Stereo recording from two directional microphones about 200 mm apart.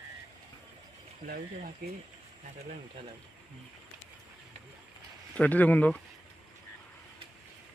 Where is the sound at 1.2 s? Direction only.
50° right (ahead or behind).